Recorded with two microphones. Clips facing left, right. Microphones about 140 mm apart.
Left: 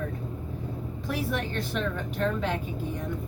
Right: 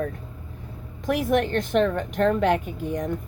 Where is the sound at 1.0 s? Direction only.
70° right (ahead or behind).